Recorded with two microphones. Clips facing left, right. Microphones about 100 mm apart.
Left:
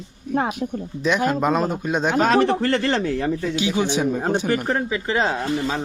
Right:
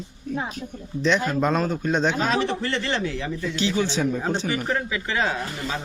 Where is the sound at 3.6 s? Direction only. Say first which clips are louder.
Right 1 dB; 15° left (ahead or behind).